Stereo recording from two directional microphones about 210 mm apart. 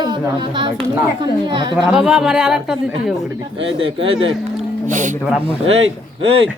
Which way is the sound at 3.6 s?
25° right (ahead or behind).